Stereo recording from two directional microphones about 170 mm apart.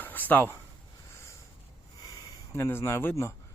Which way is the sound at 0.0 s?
10° left (ahead or behind).